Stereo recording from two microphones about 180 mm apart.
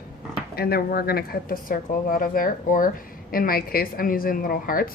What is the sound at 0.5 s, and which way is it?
A woman's voice, 60° left (ahead or behind).